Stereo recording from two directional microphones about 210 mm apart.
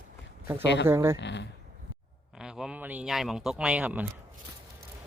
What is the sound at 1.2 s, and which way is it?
Speech, 55° left (ahead or behind).